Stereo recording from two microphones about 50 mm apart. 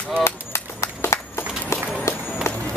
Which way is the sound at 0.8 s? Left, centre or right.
Left.